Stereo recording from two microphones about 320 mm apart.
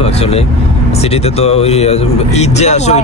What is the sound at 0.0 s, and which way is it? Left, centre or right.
Speech, centre.